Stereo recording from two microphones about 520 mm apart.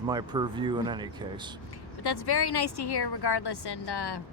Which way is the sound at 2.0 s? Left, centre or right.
Left.